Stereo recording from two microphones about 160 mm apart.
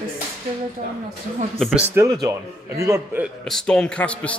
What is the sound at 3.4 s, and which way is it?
Speech, 5° left (ahead or behind).